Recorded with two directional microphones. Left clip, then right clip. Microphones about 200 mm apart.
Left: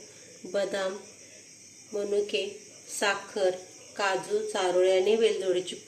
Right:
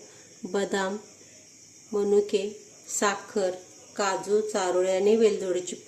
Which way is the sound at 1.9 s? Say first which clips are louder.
Right 5 dB; 55° right (ahead or behind).